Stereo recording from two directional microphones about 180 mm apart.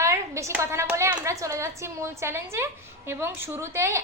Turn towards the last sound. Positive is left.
turn(degrees=-15)  # may be behind; listen again after turning